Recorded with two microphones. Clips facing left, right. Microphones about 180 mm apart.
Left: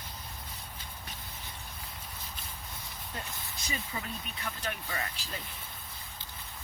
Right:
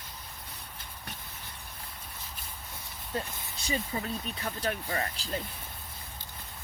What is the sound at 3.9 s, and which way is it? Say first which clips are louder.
Speech: right 5 dB; 30° right (ahead or behind).